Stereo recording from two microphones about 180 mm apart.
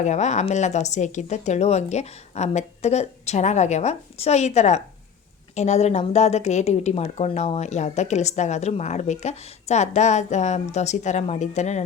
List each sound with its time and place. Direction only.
0.0 s a woman's voice: 40° left (ahead or behind)